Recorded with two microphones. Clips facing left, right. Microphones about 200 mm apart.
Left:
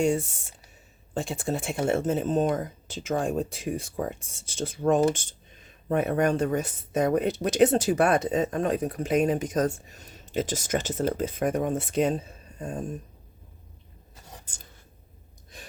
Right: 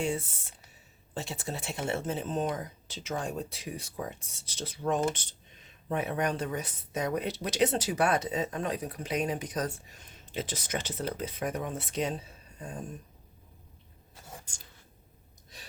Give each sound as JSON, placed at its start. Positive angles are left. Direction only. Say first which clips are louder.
{"t": 0.0, "sound": "speech", "louder": "left 7 dB", "side_deg": 45}
{"t": 15.5, "sound": "gasp", "louder": "left 6 dB", "side_deg": 50}